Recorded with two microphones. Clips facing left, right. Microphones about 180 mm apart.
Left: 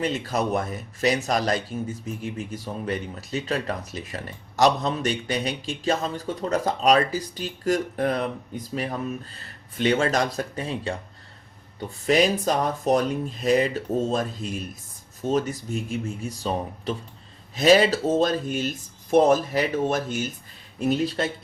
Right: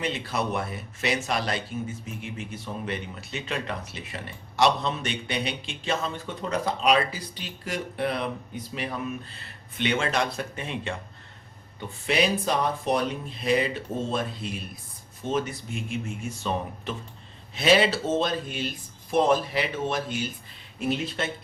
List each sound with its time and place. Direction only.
0.0 s speech: 40° left (ahead or behind)